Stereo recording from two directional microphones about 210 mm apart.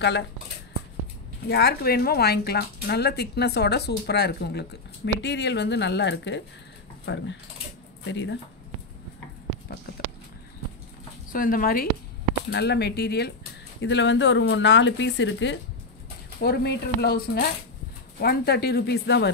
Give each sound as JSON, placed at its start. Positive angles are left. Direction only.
{"t": 0.0, "sound": "speech", "side_deg": 55}
{"t": 1.5, "sound": "speech", "side_deg": 50}
{"t": 11.3, "sound": "speech", "side_deg": 40}